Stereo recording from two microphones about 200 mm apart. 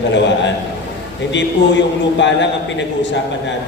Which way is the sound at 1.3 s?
65° left (ahead or behind).